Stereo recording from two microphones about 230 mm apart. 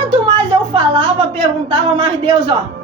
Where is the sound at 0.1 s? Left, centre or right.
Right.